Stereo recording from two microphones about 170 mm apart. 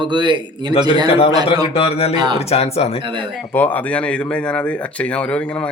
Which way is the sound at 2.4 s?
35° left (ahead or behind).